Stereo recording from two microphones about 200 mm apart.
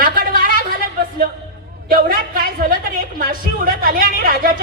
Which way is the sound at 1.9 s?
45° right (ahead or behind).